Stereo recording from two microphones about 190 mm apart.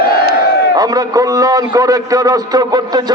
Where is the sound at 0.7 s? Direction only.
20° right (ahead or behind).